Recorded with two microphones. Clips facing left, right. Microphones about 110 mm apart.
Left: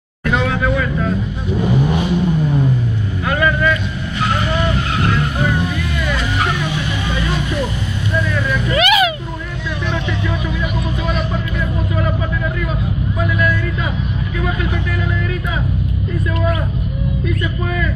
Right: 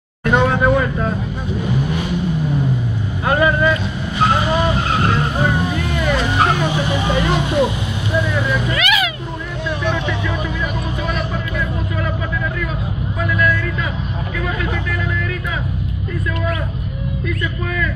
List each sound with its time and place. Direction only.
0.2 s vehicle: 35° right (ahead or behind)
3.3 s vehicle: 30° right (ahead or behind)
7.2 s vehicle: 25° right (ahead or behind)
8.7 s a sound: 35° left (ahead or behind)